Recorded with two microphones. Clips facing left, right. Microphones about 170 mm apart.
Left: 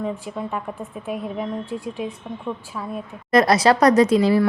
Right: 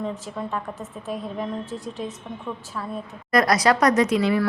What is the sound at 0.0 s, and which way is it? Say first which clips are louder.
A woman's voice: left 2 dB; 10° left (ahead or behind).